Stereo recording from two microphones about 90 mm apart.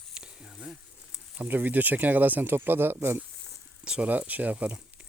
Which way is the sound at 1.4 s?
20° right (ahead or behind).